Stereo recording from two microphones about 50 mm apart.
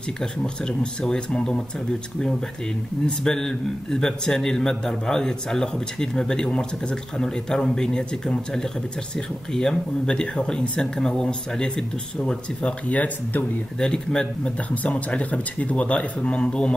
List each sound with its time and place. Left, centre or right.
0.2 s a man's voice: centre
3.1 s a man's voice: centre
12.9 s speech: left
13.7 s a man's voice: centre
14.7 s speech: left